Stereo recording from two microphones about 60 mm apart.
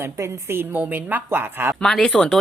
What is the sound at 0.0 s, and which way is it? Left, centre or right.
A woman's voice, right.